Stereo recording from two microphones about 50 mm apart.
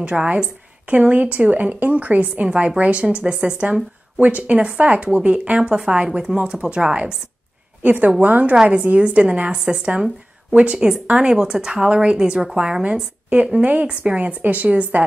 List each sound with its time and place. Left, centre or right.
0.0 s speech: right
0.8 s a woman's voice: right
7.8 s a woman's voice: right; by 13.0 s centre
13.3 s a woman's voice: right